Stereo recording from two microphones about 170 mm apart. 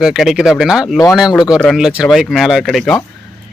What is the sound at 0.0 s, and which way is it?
Speech, 5° right (ahead or behind).